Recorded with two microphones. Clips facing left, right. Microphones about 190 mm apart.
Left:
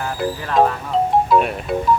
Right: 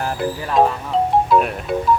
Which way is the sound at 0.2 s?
5° right (ahead or behind).